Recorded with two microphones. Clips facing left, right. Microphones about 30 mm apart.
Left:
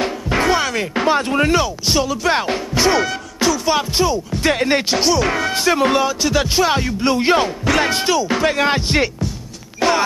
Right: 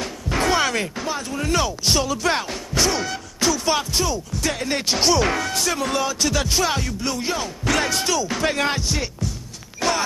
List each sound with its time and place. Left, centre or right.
0.4 s music: centre
0.9 s speech: left
1.6 s speech: centre
2.7 s music: left
3.4 s music: centre
3.9 s music: centre
4.3 s speech: left
4.9 s speech: centre
5.4 s music: left
6.0 s music: centre; by 7.5 s left
7.6 s speech: centre
7.9 s music: left
8.8 s speech: left
9.8 s a sound: centre